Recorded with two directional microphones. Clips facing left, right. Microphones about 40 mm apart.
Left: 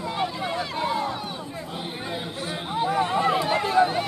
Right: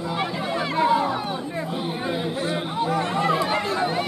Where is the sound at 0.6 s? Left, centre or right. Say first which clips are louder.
Right 8 dB; right.